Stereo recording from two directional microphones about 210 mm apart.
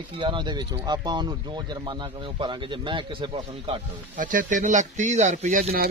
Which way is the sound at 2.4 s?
20° right (ahead or behind).